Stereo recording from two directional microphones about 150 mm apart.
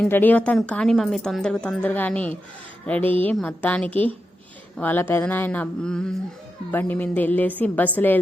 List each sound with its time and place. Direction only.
0.1 s a woman's voice: 10° left (ahead or behind)